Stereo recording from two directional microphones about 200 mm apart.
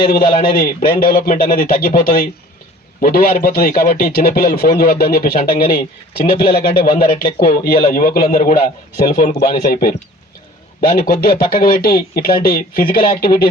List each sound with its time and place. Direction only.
0.0 s a man's voice: 25° left (ahead or behind)
0.3 s a man's voice: 45° left (ahead or behind)